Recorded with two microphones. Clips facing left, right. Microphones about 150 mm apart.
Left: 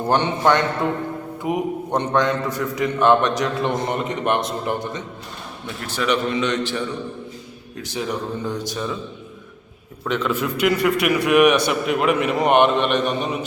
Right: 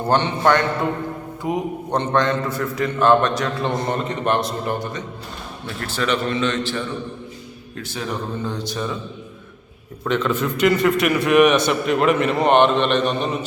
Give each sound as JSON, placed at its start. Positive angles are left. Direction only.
{"t": 0.1, "sound": "a man's voice", "side_deg": 15}
{"t": 10.0, "sound": "a man's voice", "side_deg": 5}